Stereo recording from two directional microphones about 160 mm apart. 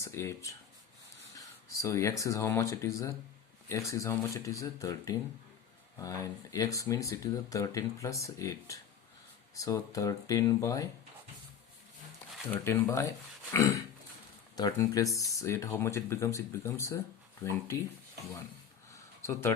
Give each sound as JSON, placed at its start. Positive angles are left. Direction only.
{"t": 0.0, "sound": "speech", "side_deg": 15}
{"t": 1.8, "sound": "speech", "side_deg": 20}
{"t": 12.5, "sound": "speech", "side_deg": 15}
{"t": 19.2, "sound": "speech", "side_deg": 15}